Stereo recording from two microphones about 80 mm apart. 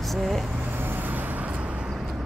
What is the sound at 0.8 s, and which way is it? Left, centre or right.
Vehicle, right.